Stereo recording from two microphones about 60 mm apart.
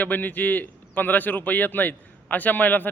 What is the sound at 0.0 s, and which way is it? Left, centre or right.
A man's voice, left.